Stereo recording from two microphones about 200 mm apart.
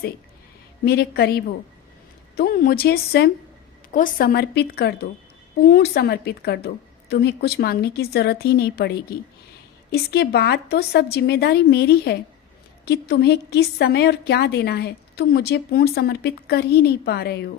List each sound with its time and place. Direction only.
0.9 s a woman's voice: 50° left (ahead or behind)